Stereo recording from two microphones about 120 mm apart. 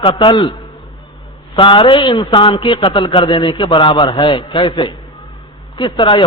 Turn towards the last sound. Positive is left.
turn(degrees=40)  # may be behind; listen again after turning